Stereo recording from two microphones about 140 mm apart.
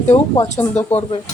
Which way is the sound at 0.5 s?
15° left (ahead or behind).